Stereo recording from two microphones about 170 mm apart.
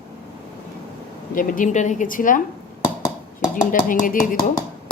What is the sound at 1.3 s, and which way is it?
A woman's voice, 50° left (ahead or behind).